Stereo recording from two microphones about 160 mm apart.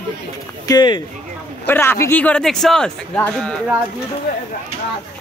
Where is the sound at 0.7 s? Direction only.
25° left (ahead or behind).